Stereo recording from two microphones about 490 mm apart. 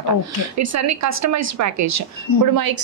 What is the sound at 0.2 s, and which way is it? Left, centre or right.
Speech, right.